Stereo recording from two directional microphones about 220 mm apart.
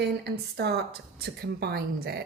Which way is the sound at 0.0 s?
50° right (ahead or behind).